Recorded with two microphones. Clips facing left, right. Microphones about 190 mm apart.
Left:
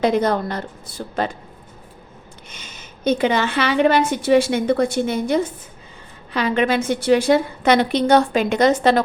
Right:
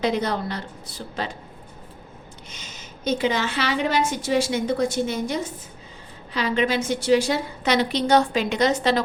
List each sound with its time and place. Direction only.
0.0 s a woman's voice: 50° left (ahead or behind)
2.5 s a woman's voice: 55° left (ahead or behind)